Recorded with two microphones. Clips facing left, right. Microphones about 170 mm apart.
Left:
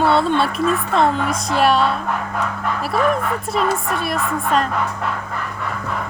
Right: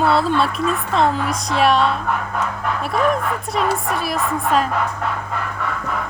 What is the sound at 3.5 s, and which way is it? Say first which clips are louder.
Speech: even; centre (ahead or behind).